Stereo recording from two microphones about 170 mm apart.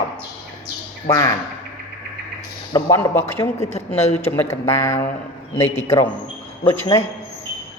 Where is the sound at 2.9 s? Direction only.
15° left (ahead or behind).